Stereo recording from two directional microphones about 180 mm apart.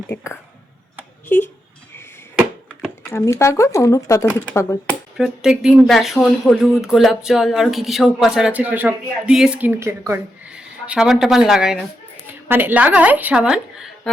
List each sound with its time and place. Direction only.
0.1 s speech: 15° left (ahead or behind)
2.6 s speech: 15° left (ahead or behind)
5.1 s speech: centre (ahead or behind)